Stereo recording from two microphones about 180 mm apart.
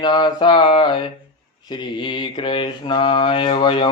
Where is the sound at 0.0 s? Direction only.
25° left (ahead or behind).